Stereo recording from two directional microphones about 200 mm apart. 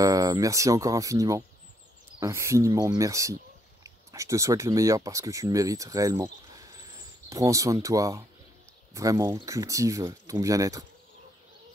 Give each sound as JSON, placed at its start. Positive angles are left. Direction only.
{"t": 0.0, "sound": "speech", "side_deg": -15}